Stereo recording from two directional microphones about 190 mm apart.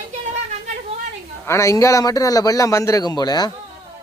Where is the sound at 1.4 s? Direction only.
15° left (ahead or behind).